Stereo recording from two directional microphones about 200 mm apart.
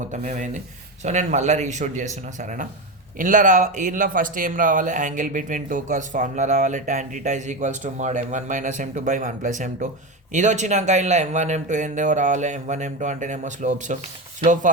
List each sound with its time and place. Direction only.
0.0 s a man's voice: 35° right (ahead or behind)